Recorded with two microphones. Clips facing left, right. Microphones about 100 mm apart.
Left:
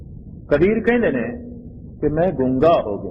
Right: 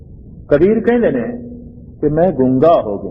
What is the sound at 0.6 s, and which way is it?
Speech, 20° right (ahead or behind).